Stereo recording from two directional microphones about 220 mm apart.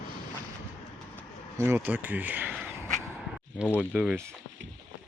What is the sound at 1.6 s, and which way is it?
Speech, 10° right (ahead or behind).